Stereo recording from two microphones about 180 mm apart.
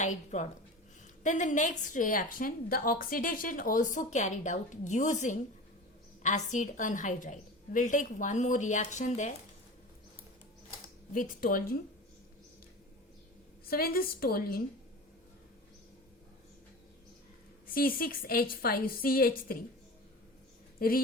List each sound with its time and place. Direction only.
0.0 s a woman's voice: 40° left (ahead or behind)
11.1 s a woman's voice: 50° left (ahead or behind)
13.7 s a woman's voice: 55° left (ahead or behind)
17.7 s a woman's voice: 55° left (ahead or behind)
20.7 s speech: 50° left (ahead or behind)